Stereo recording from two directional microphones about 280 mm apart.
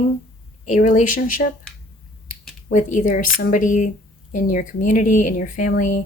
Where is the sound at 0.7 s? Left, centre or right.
Left.